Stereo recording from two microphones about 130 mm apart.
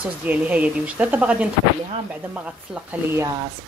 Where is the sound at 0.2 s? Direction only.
10° right (ahead or behind).